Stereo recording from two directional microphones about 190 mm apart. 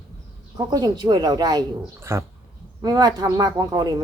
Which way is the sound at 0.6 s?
20° right (ahead or behind).